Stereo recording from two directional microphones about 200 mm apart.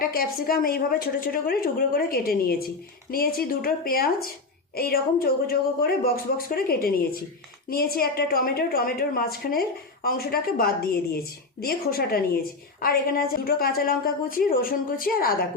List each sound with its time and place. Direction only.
0.0 s a woman's voice: 45° left (ahead or behind)